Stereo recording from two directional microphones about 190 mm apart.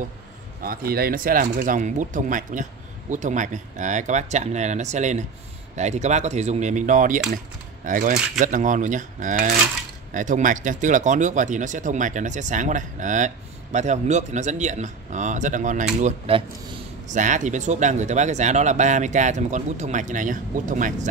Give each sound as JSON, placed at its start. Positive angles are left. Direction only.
{"t": 0.6, "sound": "speech", "side_deg": -50}